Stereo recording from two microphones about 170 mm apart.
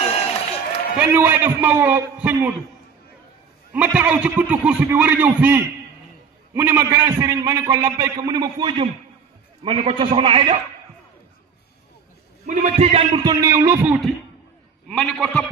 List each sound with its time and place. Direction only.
0.0 s a sound: 35° left (ahead or behind)
0.9 s a man's voice: 10° right (ahead or behind)
3.7 s a man's voice: 10° right (ahead or behind); by 10.6 s 30° right (ahead or behind)
12.4 s a man's voice: 45° right (ahead or behind)
13.2 s a man's voice: 20° right (ahead or behind)
14.9 s a man's voice: 5° left (ahead or behind)